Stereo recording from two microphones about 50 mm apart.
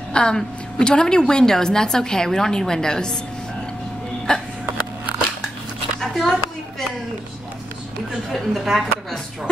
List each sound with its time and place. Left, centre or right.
0.1 s a woman's voice: centre
4.3 s speech: centre
5.9 s a sound: centre
8.3 s speech: centre